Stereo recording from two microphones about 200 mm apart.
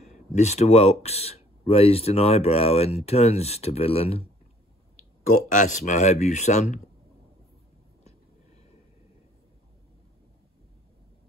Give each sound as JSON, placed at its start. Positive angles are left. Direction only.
{"t": 0.1, "sound": "speech", "side_deg": 35}
{"t": 5.5, "sound": "speech", "side_deg": 40}